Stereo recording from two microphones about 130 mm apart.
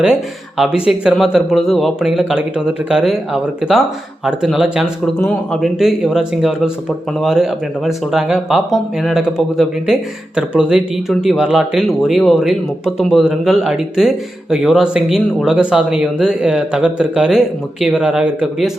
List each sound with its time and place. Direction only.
0.0 s speech: 5° right (ahead or behind)